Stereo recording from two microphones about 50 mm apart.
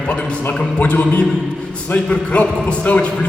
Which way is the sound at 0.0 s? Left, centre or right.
Left.